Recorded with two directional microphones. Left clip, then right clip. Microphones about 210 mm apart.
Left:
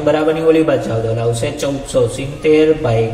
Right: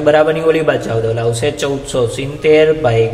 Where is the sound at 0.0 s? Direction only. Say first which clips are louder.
Right 3 dB; 45° right (ahead or behind).